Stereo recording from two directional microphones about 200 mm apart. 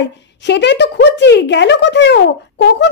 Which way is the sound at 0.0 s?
60° left (ahead or behind).